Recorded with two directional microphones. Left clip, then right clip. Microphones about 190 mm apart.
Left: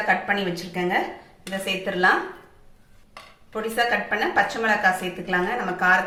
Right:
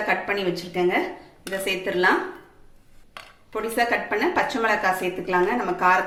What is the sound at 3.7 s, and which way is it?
A woman's voice, 30° right (ahead or behind).